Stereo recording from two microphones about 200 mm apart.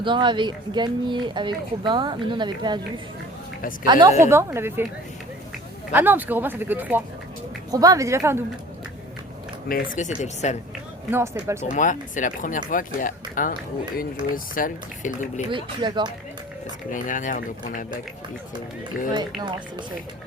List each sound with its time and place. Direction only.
0.0 s speech: 25° right (ahead or behind)
3.8 s speech: 20° right (ahead or behind)
5.9 s speech: 10° right (ahead or behind)
9.6 s speech: 45° left (ahead or behind)
11.1 s speech: 15° right (ahead or behind)
11.7 s speech: 40° left (ahead or behind)
15.4 s speech: 25° right (ahead or behind)
16.9 s speech: 40° left (ahead or behind)
19.4 s speech: 20° right (ahead or behind)